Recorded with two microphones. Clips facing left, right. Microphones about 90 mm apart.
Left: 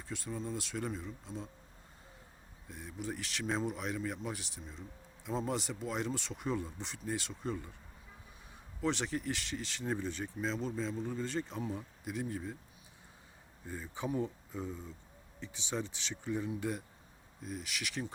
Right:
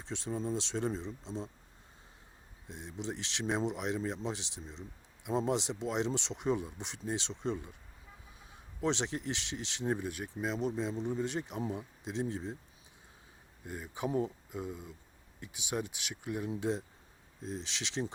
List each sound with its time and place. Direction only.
0.0 s speech: 25° right (ahead or behind)
2.6 s speech: 20° right (ahead or behind)
8.8 s speech: 20° right (ahead or behind)
13.7 s speech: 15° right (ahead or behind)
16.5 s speech: 25° right (ahead or behind)